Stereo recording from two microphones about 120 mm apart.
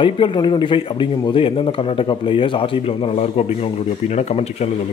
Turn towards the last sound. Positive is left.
turn(degrees=65)  # may be behind; listen again after turning